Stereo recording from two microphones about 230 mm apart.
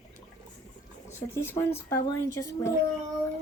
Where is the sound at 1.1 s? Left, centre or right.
Centre.